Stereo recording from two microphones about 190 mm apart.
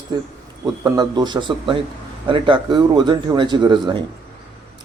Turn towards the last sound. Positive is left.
turn(degrees=-25)  # may be behind; listen again after turning